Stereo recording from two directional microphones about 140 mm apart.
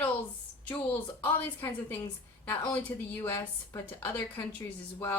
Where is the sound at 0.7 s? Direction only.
10° left (ahead or behind).